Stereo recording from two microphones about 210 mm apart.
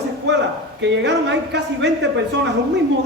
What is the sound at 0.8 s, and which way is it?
A man's voice, 55° right (ahead or behind).